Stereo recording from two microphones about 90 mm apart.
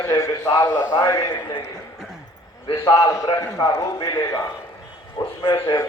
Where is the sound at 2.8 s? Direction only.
40° left (ahead or behind).